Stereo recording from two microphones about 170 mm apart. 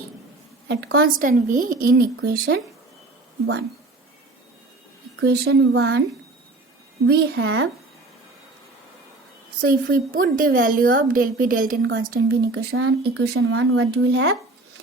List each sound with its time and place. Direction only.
0.7 s a woman's voice: 70° right (ahead or behind)
5.2 s speech: 75° right (ahead or behind)
7.1 s speech: 75° right (ahead or behind)
9.6 s a woman's voice: 60° right (ahead or behind)
11.9 s speech: 65° right (ahead or behind); by 14.3 s 90° right